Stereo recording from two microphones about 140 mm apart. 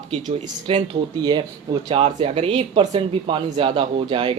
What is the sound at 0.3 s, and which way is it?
Speech, 30° right (ahead or behind).